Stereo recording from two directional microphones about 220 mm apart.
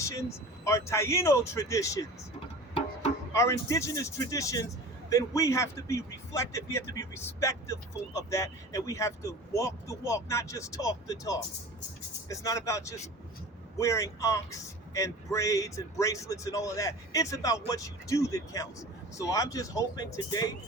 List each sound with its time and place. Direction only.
0.0 s a man's voice: 15° left (ahead or behind)
3.3 s a man's voice: 15° left (ahead or behind)